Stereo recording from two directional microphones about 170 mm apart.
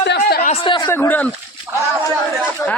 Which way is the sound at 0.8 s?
10° left (ahead or behind).